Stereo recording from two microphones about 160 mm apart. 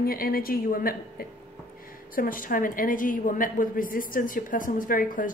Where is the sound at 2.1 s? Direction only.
60° left (ahead or behind).